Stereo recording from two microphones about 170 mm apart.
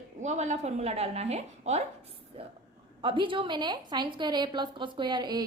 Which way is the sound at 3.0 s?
30° right (ahead or behind).